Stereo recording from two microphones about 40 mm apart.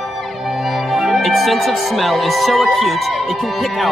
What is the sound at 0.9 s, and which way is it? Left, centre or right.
Speech, centre.